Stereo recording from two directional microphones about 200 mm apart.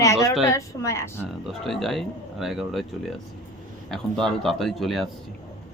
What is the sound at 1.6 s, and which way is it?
Speech, centre (ahead or behind).